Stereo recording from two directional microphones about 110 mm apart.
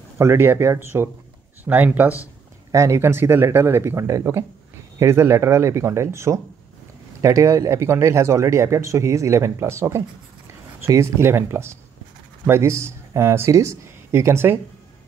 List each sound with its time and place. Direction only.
0.2 s speech: 25° right (ahead or behind)
2.7 s speech: 25° right (ahead or behind)